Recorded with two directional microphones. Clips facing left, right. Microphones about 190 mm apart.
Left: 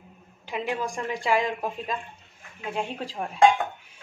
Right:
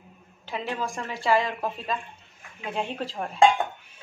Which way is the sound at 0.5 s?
10° left (ahead or behind).